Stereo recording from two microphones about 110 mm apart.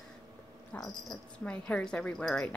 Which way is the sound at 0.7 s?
5° left (ahead or behind).